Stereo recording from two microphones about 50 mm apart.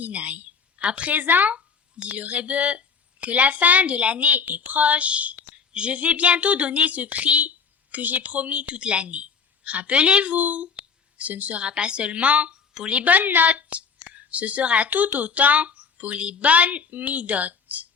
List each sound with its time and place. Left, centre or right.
0.0 s a woman's voice: right
1.5 s speech: right
10.8 s a sound: right
11.6 s a woman's voice: centre